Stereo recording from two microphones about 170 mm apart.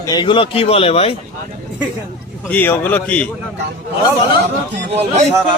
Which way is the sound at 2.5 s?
10° left (ahead or behind).